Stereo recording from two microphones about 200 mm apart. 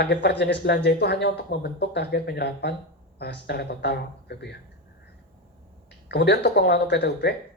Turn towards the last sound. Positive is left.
turn(degrees=55)  # may be behind; listen again after turning